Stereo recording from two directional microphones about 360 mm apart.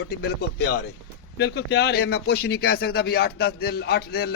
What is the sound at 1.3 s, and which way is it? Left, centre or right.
Speech, left.